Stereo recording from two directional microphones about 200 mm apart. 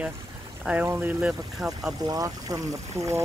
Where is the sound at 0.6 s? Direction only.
10° right (ahead or behind).